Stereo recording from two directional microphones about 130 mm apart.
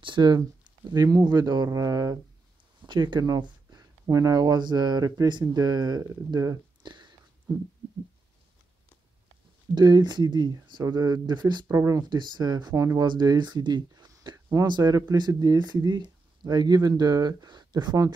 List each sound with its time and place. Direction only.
0.0 s speech: 35° right (ahead or behind)
9.8 s speech: 35° right (ahead or behind)
11.6 s speech: 25° right (ahead or behind)